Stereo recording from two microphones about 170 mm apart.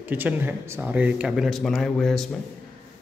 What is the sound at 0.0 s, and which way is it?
Speech, 10° right (ahead or behind).